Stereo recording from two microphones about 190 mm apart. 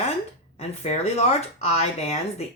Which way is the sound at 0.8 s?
35° left (ahead or behind).